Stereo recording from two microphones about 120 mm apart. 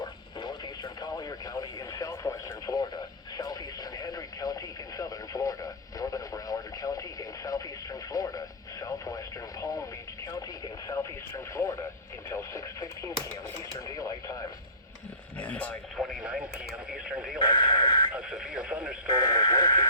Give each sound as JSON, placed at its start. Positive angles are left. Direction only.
{"t": 0.0, "sound": "radio", "side_deg": 35}
{"t": 10.8, "sound": "radio", "side_deg": 25}
{"t": 15.4, "sound": "a sound", "side_deg": 15}
{"t": 16.0, "sound": "radio", "side_deg": 5}
{"t": 17.4, "sound": "radio", "side_deg": 40}
{"t": 18.1, "sound": "radio", "side_deg": -5}
{"t": 19.3, "sound": "radio", "side_deg": 35}